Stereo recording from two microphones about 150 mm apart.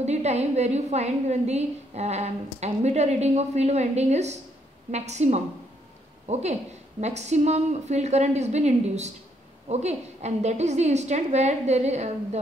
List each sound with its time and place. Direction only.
0.0 s a woman's voice: 50° right (ahead or behind)